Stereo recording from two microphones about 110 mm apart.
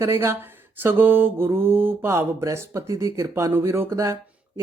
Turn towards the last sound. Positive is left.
turn(degrees=-30)  # may be behind; listen again after turning